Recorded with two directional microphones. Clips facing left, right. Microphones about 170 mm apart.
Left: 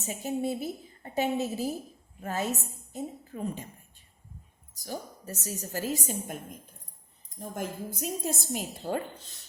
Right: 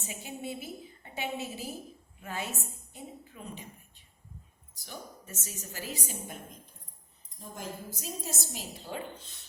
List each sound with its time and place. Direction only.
0.0 s a woman's voice: 40° left (ahead or behind)
4.7 s a woman's voice: 40° left (ahead or behind)
7.3 s a woman's voice: 55° left (ahead or behind)